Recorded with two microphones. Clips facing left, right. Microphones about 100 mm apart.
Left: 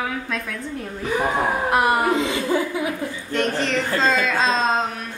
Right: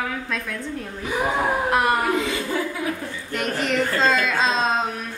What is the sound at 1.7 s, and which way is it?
Speech, 5° left (ahead or behind).